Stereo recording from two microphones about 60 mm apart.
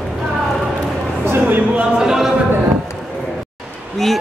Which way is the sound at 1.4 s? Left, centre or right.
Right.